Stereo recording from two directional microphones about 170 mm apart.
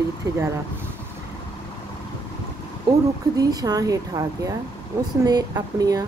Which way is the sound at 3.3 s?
20° right (ahead or behind).